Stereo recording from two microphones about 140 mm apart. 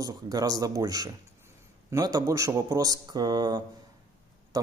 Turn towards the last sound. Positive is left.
turn(degrees=-25)  # may be behind; listen again after turning